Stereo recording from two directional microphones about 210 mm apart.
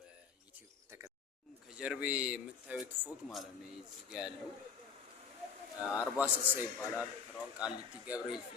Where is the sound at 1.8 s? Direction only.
5° right (ahead or behind).